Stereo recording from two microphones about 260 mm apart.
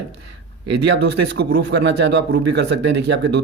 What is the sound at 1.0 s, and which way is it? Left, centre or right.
A man's voice, right.